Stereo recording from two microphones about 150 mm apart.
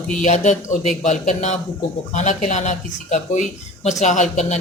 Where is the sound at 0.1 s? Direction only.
55° left (ahead or behind).